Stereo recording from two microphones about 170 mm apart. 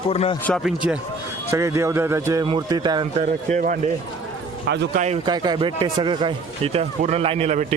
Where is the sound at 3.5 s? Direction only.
50° right (ahead or behind).